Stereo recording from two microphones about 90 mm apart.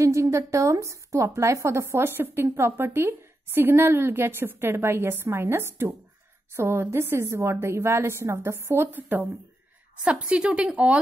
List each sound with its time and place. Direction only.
0.0 s a woman's voice: 35° right (ahead or behind); by 11.0 s 15° right (ahead or behind)